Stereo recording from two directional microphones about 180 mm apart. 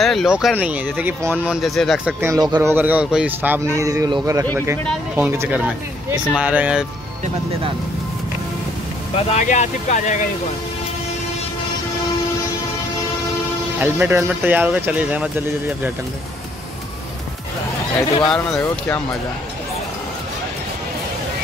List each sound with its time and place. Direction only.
0.0 s speech: centre (ahead or behind)
2.1 s speech: 15° right (ahead or behind)
2.7 s speech: 10° right (ahead or behind)
9.1 s speech: 40° left (ahead or behind)
13.7 s speech: 10° right (ahead or behind)
18.2 s speech: 5° left (ahead or behind)